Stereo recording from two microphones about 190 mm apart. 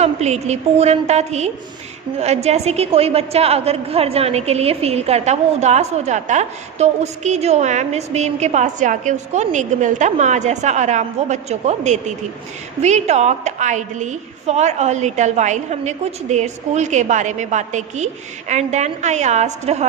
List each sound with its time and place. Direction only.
0.0 s a woman's voice: 35° right (ahead or behind)